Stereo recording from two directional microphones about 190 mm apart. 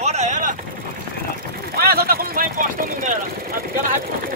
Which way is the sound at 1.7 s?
50° right (ahead or behind).